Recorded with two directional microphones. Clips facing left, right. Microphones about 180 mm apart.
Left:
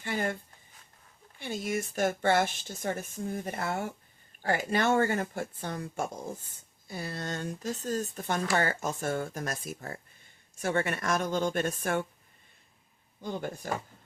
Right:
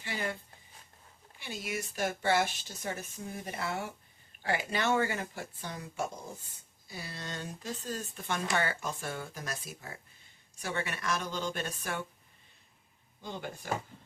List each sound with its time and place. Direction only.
0.0 s speech: 50° left (ahead or behind)
1.4 s speech: 50° left (ahead or behind)
13.2 s speech: 45° left (ahead or behind)